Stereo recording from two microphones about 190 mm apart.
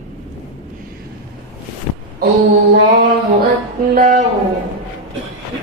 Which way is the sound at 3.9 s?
50° right (ahead or behind).